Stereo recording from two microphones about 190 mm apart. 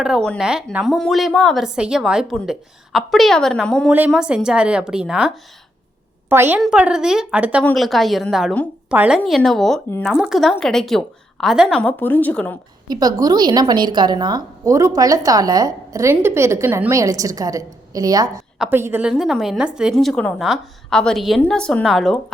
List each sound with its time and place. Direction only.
0.3 s a woman's voice: 5° right (ahead or behind)
7.6 s speech: 5° left (ahead or behind)
11.8 s speech: 10° left (ahead or behind)
12.9 s a woman's voice: 20° right (ahead or behind)
19.1 s speech: centre (ahead or behind)